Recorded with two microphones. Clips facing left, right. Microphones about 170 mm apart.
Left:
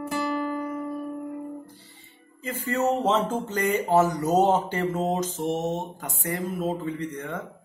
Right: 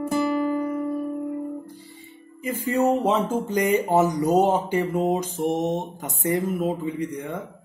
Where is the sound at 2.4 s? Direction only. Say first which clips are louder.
Right 4 dB; 15° right (ahead or behind).